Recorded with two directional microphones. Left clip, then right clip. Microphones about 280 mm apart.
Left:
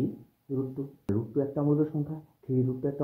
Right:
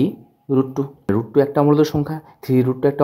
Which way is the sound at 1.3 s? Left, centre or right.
Right.